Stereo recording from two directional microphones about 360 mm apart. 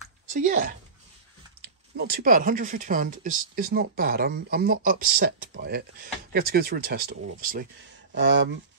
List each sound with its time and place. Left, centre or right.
0.3 s speech: right